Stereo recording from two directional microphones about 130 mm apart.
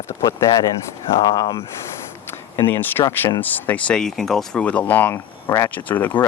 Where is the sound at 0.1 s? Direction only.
25° left (ahead or behind).